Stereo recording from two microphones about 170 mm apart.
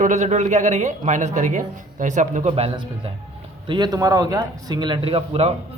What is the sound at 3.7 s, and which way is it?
A man's voice, 25° right (ahead or behind).